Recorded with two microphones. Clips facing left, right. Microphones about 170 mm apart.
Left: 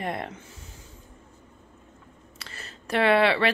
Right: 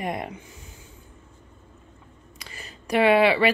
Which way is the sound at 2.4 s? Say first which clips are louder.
Right 1 dB; 10° right (ahead or behind).